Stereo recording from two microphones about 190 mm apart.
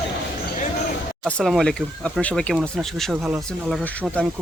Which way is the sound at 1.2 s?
5° left (ahead or behind).